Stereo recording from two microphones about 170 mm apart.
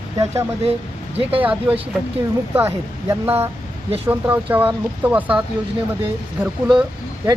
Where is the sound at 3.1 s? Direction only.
15° right (ahead or behind).